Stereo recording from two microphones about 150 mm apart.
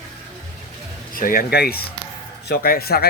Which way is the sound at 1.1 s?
70° left (ahead or behind).